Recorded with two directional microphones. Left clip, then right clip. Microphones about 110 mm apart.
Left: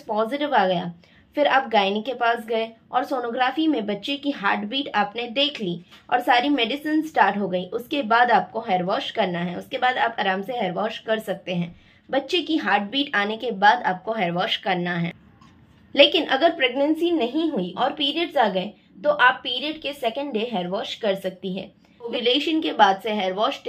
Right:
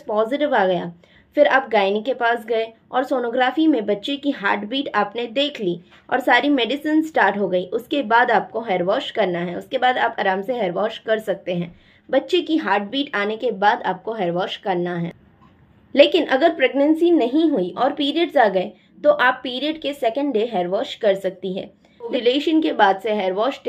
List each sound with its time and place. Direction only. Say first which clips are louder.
0.1 s a woman's voice: right 3 dB; 35° right (ahead or behind); by 13.9 s 10° right (ahead or behind)
14.0 s a woman's voice: right 1 dB; 25° right (ahead or behind); by 21.6 s 50° right (ahead or behind)
22.0 s a woman's voice: right 3 dB; 35° right (ahead or behind)